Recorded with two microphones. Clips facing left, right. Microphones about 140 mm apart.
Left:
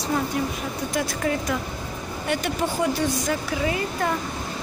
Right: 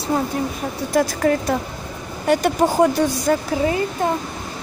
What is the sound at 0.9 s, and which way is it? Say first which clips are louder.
Speech: right 8 dB; 40° right (ahead or behind).